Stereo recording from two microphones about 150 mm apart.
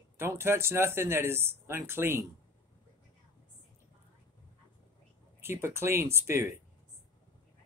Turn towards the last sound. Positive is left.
turn(degrees=-20)  # may be behind; listen again after turning